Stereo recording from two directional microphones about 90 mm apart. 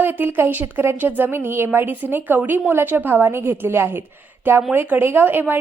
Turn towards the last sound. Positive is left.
turn(degrees=-25)  # may be behind; listen again after turning